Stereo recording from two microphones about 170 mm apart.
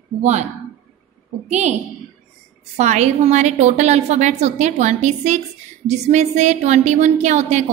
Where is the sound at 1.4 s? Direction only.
40° right (ahead or behind).